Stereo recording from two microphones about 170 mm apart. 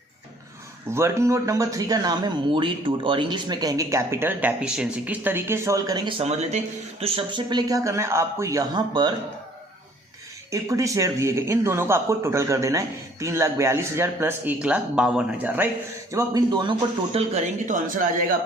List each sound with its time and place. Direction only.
0.9 s speech: 15° right (ahead or behind)
6.1 s speech: 40° right (ahead or behind)
7.0 s speech: 30° right (ahead or behind)
10.5 s speech: 20° right (ahead or behind)
16.1 s speech: 25° right (ahead or behind); by 18.1 s 50° right (ahead or behind)